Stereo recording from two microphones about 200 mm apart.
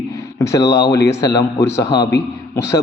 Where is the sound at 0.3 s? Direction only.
15° left (ahead or behind).